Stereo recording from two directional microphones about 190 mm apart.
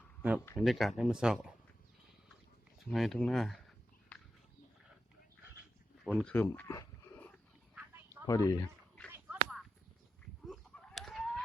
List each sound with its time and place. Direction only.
0.3 s speech: 15° left (ahead or behind)
0.6 s speech: centre (ahead or behind)
2.9 s speech: centre (ahead or behind)
4.1 s a sound: 5° left (ahead or behind)
6.1 s dog: 5° left (ahead or behind)
7.8 s a sound: 10° right (ahead or behind)
8.3 s speech: 15° left (ahead or behind)
9.1 s whip: 5° right (ahead or behind)
10.4 s chicken: centre (ahead or behind)